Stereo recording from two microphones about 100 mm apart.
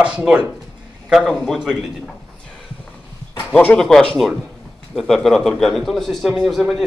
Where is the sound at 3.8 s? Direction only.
5° left (ahead or behind).